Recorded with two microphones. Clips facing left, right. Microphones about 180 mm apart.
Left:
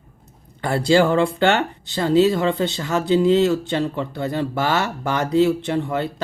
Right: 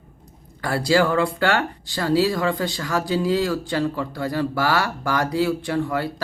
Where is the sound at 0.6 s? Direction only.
25° left (ahead or behind).